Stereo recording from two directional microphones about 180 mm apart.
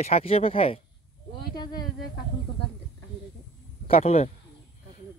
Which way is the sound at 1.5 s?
25° left (ahead or behind).